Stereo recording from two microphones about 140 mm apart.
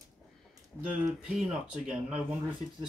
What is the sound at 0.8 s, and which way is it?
Speech, 5° right (ahead or behind).